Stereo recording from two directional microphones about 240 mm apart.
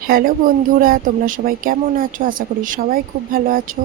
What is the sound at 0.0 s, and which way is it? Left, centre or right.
Speech, right.